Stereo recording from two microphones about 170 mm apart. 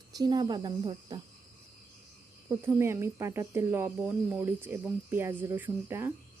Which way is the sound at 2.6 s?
15° right (ahead or behind).